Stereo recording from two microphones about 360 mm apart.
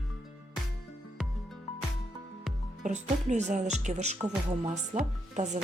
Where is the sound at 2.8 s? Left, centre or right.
Centre.